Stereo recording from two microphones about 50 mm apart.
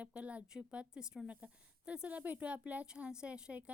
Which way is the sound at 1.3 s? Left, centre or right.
Right.